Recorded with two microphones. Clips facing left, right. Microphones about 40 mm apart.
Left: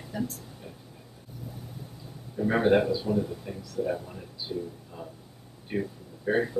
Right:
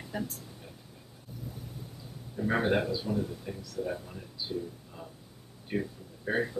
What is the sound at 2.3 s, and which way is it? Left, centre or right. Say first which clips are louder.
Speech: left 5 dB; centre.